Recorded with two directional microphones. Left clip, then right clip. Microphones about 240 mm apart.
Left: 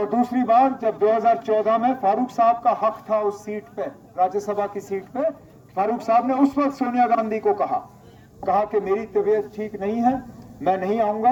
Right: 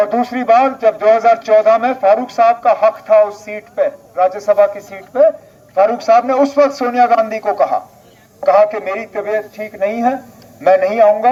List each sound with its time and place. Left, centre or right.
0.0 s speech: right